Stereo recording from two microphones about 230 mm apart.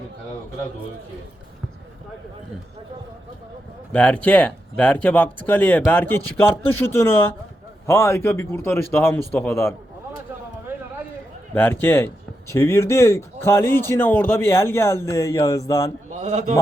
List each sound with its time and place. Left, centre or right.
3.9 s speech: centre
11.5 s speech: centre
16.2 s a man's voice: right